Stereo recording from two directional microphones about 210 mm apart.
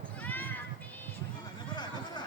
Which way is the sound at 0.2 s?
10° left (ahead or behind).